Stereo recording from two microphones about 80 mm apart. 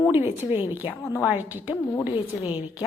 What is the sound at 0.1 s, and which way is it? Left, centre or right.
A woman's voice, right.